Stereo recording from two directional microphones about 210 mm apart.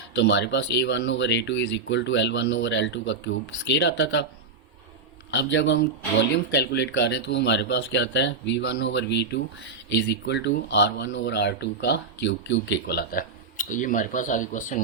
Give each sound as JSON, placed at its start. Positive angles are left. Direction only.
{"t": 0.1, "sound": "speech", "side_deg": 60}
{"t": 5.3, "sound": "speech", "side_deg": 55}